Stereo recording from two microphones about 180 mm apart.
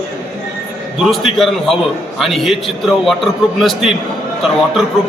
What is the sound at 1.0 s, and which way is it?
A man's voice, centre (ahead or behind).